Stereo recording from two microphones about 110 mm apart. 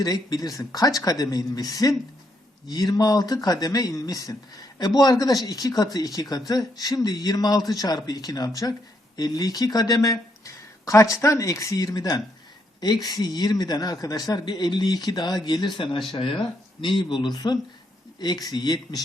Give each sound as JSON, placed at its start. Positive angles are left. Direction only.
{"t": 0.0, "sound": "speech", "side_deg": 35}